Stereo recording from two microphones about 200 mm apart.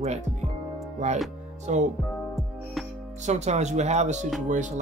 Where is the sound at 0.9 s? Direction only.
35° right (ahead or behind).